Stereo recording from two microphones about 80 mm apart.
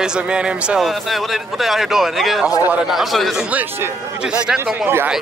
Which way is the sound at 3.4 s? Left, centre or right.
Right.